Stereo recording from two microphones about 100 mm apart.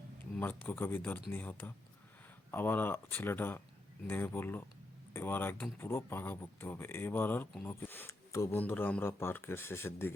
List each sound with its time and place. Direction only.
0.3 s speech: 20° left (ahead or behind)
8.6 s speech: 20° left (ahead or behind)